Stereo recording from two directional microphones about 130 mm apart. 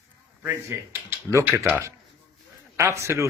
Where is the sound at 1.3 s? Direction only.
20° right (ahead or behind).